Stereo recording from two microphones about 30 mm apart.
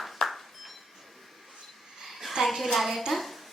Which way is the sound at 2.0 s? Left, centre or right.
Centre.